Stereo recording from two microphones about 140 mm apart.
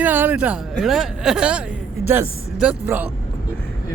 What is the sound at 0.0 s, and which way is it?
Speech, 15° right (ahead or behind).